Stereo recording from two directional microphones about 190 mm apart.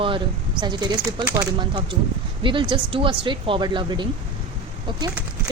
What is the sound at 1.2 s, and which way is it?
Speech, 10° right (ahead or behind).